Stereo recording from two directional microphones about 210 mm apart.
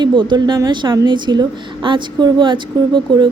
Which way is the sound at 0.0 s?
20° right (ahead or behind).